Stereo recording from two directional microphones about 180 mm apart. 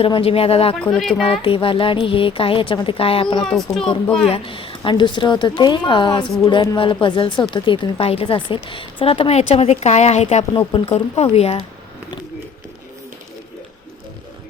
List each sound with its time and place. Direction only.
0.0 s a woman's voice: 30° left (ahead or behind)
4.0 s speech: 5° left (ahead or behind)
4.3 s a woman's voice: 30° left (ahead or behind)
10.5 s a woman's voice: 25° left (ahead or behind)